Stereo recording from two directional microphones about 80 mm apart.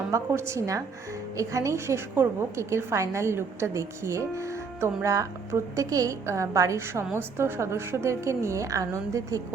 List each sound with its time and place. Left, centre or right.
0.1 s a woman's voice: right